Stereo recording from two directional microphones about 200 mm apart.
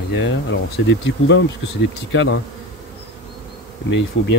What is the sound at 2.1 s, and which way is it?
Bee, 70° left (ahead or behind).